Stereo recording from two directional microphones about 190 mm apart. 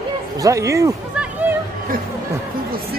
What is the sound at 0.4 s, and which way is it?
Speech, 15° right (ahead or behind).